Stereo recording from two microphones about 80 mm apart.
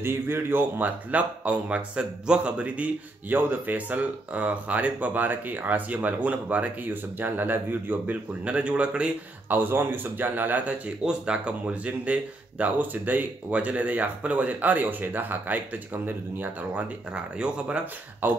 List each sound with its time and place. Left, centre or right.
0.0 s speech: right
9.6 s speech: right
17.1 s speech: centre